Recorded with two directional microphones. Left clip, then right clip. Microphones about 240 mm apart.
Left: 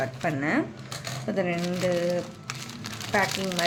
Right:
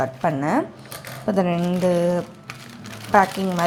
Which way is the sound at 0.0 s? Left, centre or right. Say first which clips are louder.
Right 6 dB; centre.